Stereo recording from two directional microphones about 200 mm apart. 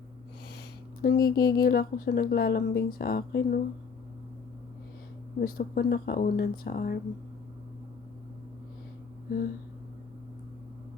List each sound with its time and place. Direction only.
1.0 s speech: 50° left (ahead or behind)
5.4 s speech: 50° left (ahead or behind)